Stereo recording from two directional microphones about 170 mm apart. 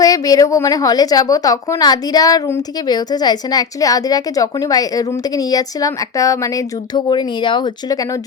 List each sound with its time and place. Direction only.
0.0 s a woman's voice: 20° left (ahead or behind)